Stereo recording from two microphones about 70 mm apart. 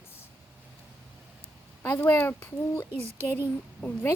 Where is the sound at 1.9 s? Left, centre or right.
Left.